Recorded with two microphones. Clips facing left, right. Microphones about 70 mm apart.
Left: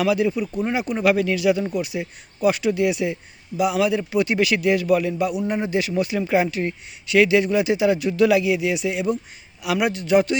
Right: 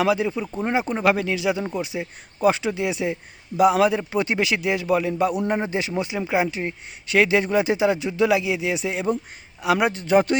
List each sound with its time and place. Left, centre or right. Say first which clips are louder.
0.0 s speech: left 1 dB; right
7.1 s a man's voice: left 2 dB; right